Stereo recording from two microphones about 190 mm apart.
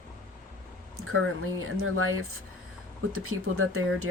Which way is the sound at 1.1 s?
90° right.